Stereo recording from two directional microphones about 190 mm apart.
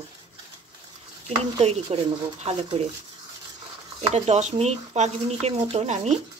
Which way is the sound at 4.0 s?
35° right (ahead or behind).